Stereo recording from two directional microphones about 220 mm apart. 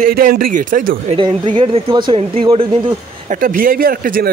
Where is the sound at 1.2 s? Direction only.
25° right (ahead or behind).